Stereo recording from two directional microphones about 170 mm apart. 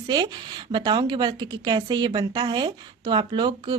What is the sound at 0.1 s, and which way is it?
A woman's voice, 25° right (ahead or behind).